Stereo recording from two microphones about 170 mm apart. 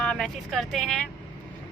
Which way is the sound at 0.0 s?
5° left (ahead or behind).